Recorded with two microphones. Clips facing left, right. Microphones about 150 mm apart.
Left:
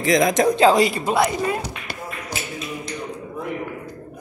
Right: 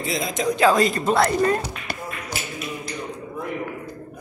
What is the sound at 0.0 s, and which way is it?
Speech, 90° left.